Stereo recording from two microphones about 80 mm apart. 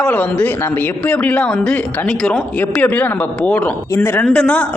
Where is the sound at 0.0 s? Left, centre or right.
Centre.